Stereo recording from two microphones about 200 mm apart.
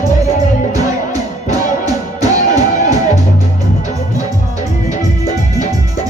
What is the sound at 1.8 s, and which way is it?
Music, 15° right (ahead or behind).